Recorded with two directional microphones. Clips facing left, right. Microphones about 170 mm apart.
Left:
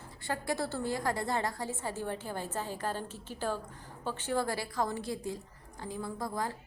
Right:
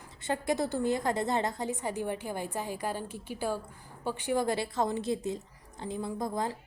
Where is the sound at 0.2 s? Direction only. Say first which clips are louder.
Right 4 dB; 20° right (ahead or behind).